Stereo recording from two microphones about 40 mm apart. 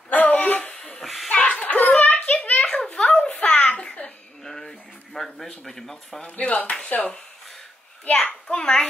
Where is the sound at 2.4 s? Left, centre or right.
Left.